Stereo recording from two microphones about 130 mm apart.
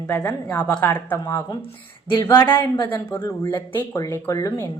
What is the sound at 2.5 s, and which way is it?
Speech, 35° left (ahead or behind).